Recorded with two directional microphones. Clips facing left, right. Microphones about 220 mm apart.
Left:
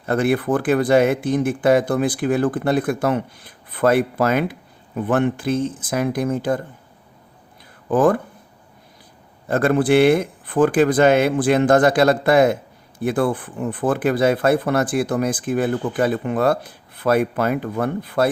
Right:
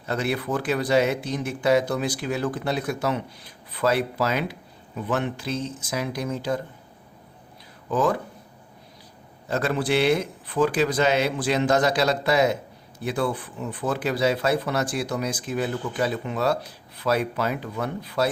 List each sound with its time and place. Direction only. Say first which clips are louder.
0.0 s speech: left 8 dB; 50° left (ahead or behind)
7.9 s speech: left 7 dB; 50° left (ahead or behind)
9.5 s speech: left 7 dB; 55° left (ahead or behind)